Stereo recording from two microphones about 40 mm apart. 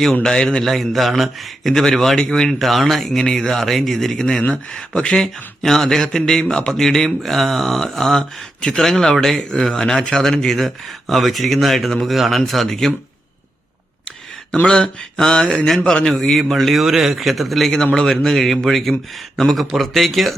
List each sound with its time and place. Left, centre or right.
0.0 s speech: centre
1.8 s speech: centre
2.5 s speech: centre
9.5 s speech: centre
10.6 s speech: centre
14.7 s speech: centre
16.8 s speech: centre
17.9 s speech: centre